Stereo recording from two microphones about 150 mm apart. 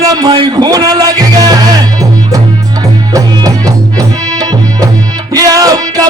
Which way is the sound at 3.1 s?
25° right (ahead or behind).